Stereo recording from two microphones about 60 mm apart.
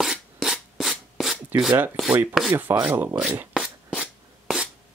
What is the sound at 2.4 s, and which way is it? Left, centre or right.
Speech, centre.